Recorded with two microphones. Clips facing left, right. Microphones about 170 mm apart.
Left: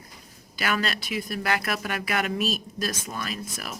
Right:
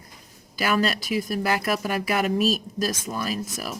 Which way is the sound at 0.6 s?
40° right (ahead or behind).